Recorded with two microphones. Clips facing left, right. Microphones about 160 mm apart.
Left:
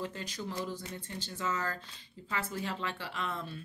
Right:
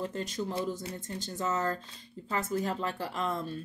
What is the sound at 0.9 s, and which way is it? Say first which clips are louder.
A woman's voice: right 4 dB; 40° right (ahead or behind).